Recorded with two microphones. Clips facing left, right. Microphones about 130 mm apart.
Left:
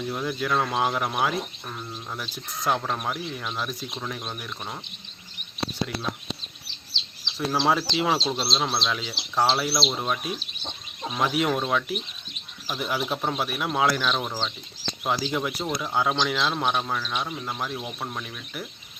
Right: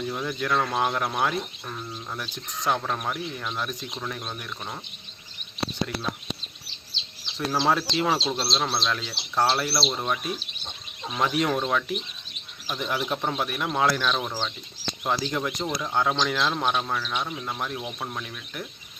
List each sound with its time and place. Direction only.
0.0 s speech: 5° left (ahead or behind)
7.3 s speech: 5° left (ahead or behind)